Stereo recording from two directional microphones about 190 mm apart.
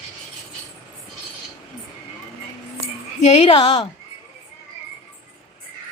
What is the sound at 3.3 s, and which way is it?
Speech, 30° left (ahead or behind).